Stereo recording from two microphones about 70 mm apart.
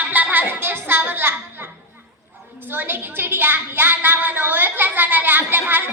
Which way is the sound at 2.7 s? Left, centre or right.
Right.